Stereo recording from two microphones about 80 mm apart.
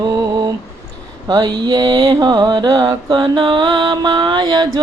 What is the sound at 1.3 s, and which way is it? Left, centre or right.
Mantra, right.